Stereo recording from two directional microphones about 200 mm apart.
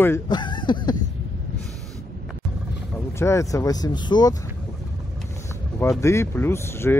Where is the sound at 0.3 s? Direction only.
20° left (ahead or behind).